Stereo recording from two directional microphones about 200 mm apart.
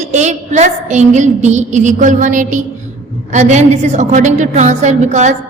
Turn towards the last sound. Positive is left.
turn(degrees=-35)  # may be behind; listen again after turning